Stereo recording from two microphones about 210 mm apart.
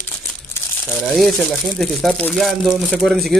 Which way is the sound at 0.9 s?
Centre (ahead or behind).